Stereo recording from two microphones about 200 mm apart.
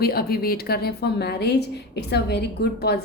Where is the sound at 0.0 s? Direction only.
50° left (ahead or behind).